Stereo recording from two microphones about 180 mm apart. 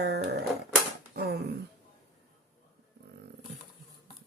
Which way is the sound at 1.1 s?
65° right (ahead or behind).